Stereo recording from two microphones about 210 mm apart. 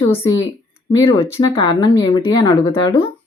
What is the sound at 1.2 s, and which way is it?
Speech, 25° left (ahead or behind).